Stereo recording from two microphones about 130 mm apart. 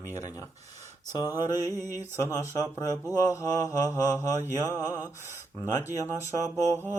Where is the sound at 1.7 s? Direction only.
20° right (ahead or behind).